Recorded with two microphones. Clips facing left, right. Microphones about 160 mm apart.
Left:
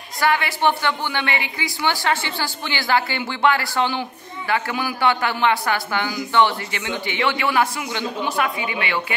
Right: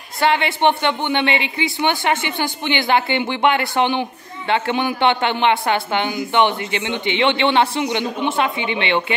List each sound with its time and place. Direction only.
0.2 s a woman's voice: 25° right (ahead or behind)